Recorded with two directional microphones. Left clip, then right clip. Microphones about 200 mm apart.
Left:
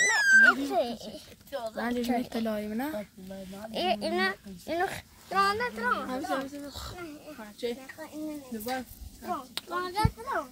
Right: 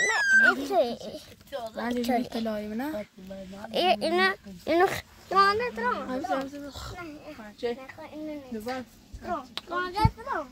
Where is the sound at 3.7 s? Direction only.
50° right (ahead or behind).